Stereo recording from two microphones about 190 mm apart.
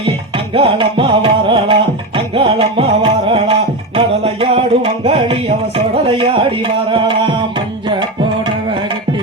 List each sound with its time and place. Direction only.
0.5 s music: 30° right (ahead or behind)